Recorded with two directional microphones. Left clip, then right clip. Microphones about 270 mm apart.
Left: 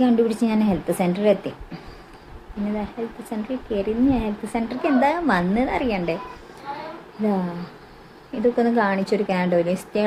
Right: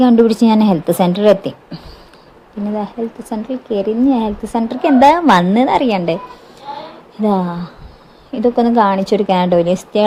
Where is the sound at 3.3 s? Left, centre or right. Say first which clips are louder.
Right 6 dB; centre.